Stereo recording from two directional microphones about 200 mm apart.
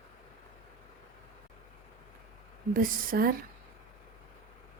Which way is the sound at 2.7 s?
50° right (ahead or behind).